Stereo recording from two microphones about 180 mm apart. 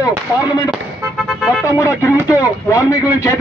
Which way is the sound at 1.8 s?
15° left (ahead or behind).